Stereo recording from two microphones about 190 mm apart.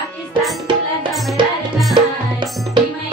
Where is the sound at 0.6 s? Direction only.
25° right (ahead or behind).